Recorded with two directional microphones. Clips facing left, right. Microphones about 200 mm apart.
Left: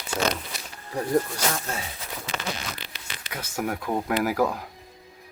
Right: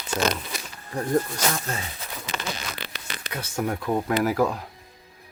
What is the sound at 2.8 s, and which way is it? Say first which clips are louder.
Tearing: right 4 dB; 60° right (ahead or behind).